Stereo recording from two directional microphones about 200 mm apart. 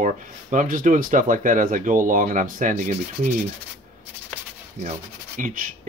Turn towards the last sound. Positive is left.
turn(degrees=-40)  # may be behind; listen again after turning